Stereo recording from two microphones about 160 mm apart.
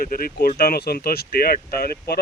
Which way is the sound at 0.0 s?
65° left (ahead or behind).